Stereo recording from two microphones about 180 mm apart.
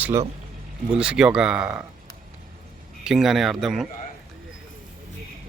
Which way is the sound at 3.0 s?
5° right (ahead or behind).